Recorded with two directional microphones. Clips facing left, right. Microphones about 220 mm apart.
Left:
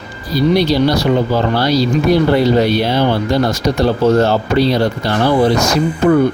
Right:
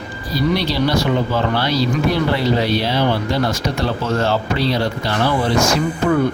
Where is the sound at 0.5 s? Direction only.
45° left (ahead or behind).